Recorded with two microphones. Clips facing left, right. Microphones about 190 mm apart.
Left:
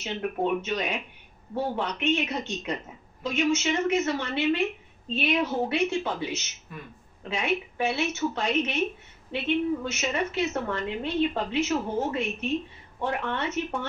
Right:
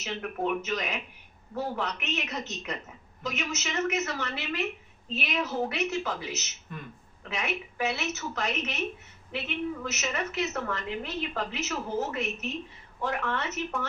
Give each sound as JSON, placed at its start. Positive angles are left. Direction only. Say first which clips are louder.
{"t": 0.0, "sound": "a woman's voice", "louder": "left 3 dB", "side_deg": 30}